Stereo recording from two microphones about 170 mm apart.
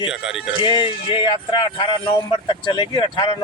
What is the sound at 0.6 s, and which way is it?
Music, 30° left (ahead or behind).